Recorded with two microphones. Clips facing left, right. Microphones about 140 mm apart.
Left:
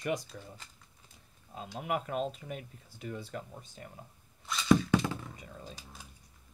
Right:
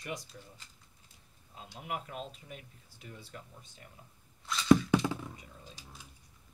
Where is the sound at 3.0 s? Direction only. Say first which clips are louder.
Left 9 dB; 90° left.